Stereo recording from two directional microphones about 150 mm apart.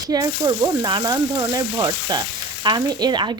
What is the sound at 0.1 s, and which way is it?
Speech, 25° right (ahead or behind).